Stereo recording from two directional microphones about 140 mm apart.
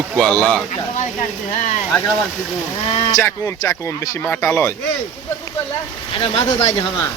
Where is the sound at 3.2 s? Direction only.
20° left (ahead or behind).